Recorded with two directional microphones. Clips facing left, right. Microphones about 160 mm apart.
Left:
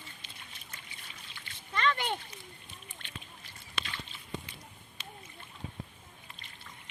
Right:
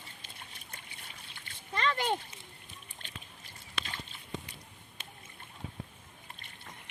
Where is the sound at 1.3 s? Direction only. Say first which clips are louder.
Even; 40° right (ahead or behind).